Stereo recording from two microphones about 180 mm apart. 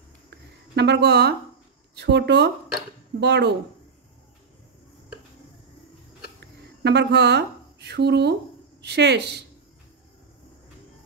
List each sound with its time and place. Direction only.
0.7 s a woman's voice: 70° right (ahead or behind)
6.4 s a woman's voice: 70° right (ahead or behind)